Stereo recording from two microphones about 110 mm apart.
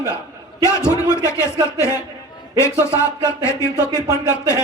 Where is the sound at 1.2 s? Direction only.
25° left (ahead or behind).